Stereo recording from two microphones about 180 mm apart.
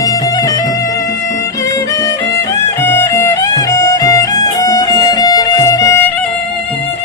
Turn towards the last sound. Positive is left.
turn(degrees=15)  # may be behind; listen again after turning